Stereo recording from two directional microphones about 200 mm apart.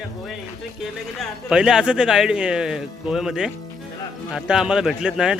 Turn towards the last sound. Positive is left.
turn(degrees=-5)  # may be behind; listen again after turning